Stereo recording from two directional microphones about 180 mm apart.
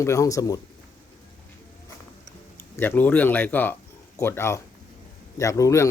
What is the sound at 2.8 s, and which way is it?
Speech, 10° left (ahead or behind).